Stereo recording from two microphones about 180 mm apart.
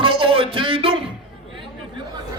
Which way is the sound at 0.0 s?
30° right (ahead or behind).